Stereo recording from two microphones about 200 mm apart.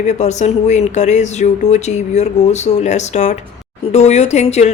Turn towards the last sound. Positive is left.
turn(degrees=35)  # may be behind; listen again after turning